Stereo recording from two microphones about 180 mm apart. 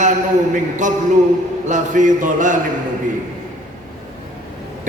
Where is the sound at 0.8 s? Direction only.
45° right (ahead or behind).